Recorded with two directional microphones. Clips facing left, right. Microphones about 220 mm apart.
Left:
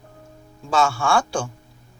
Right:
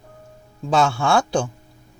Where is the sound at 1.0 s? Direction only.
20° right (ahead or behind).